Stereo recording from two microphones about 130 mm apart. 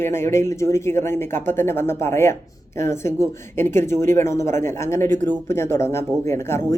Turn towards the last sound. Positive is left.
turn(degrees=20)  # may be behind; listen again after turning